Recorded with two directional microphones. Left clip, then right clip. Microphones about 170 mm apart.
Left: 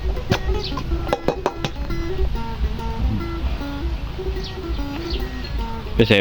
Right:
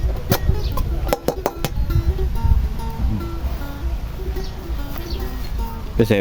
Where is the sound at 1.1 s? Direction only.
25° right (ahead or behind).